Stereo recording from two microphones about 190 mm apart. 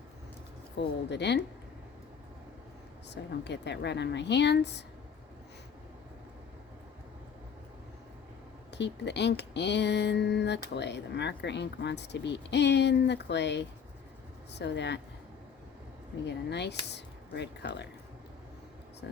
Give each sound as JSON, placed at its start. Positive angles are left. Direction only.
{"t": 0.8, "sound": "speech", "side_deg": 70}
{"t": 3.4, "sound": "speech", "side_deg": 65}
{"t": 8.7, "sound": "speech", "side_deg": 65}
{"t": 16.2, "sound": "speech", "side_deg": 65}